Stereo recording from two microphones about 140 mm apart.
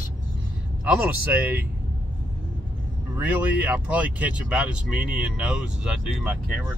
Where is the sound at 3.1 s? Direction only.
10° right (ahead or behind).